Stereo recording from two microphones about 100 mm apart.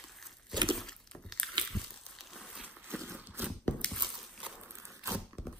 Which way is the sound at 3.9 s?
5° left (ahead or behind).